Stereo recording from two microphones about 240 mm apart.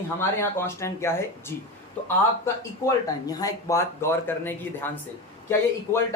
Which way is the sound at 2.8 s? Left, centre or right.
Centre.